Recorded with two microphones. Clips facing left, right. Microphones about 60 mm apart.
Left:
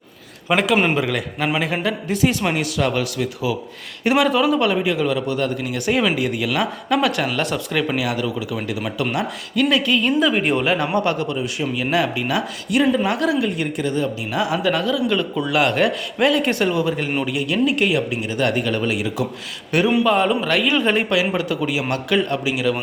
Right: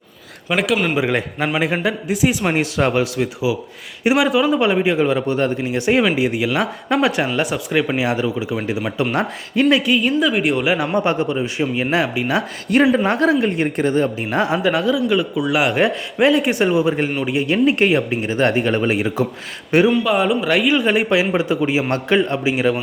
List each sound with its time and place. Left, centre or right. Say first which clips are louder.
0.4 s a man's voice: left 1 dB; centre
1.5 s speech: right 5 dB; right
2.5 s a man's voice: right 3 dB; right
4.0 s a man's voice: right 1 dB; centre
10.9 s a man's voice: right 2 dB; right
12.7 s speech: right 3 dB; right
14.6 s a man's voice: right 2 dB; right
20.1 s speech: right 1 dB; centre
21.1 s a man's voice: right 3 dB; right